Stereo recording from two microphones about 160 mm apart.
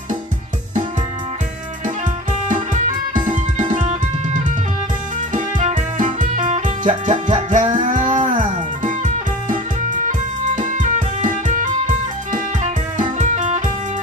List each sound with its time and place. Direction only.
3.2 s music: 55° right (ahead or behind)
5.3 s music: 50° right (ahead or behind)